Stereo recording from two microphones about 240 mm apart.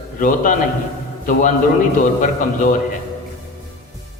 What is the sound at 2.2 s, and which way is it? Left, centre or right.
Speech, left.